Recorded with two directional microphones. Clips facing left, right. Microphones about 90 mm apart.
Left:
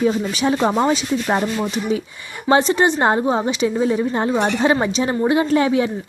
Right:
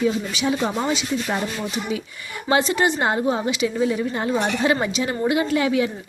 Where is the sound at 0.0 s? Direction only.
45° left (ahead or behind).